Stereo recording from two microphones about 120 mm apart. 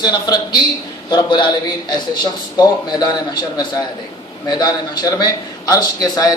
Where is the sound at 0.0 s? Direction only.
35° left (ahead or behind).